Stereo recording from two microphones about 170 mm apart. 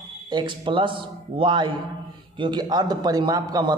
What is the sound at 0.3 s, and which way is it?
A man's voice, 25° right (ahead or behind).